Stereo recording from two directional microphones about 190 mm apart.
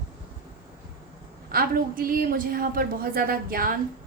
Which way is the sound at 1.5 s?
50° right (ahead or behind).